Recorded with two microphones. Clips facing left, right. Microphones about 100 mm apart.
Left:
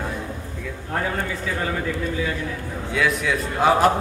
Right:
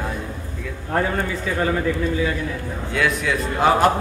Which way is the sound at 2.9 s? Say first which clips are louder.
Even; centre (ahead or behind).